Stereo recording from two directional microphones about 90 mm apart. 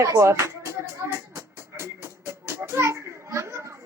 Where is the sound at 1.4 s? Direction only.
30° right (ahead or behind).